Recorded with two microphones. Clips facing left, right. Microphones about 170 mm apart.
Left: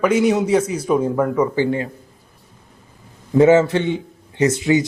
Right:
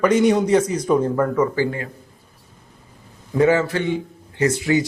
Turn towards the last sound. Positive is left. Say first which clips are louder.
# left 2 dB
turn(degrees=20)  # may be behind; listen again after turning